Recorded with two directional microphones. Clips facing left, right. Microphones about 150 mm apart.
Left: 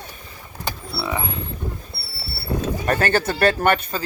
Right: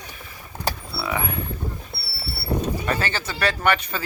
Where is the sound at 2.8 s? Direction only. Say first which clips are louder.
Left 6 dB; 55° left (ahead or behind).